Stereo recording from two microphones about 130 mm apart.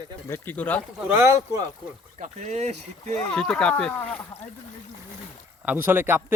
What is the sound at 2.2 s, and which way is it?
Speech, 65° right (ahead or behind).